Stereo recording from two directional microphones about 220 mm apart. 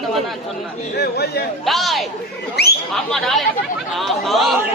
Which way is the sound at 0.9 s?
45° left (ahead or behind).